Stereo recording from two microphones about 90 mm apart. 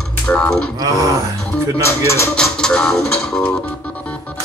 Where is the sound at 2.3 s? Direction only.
10° left (ahead or behind).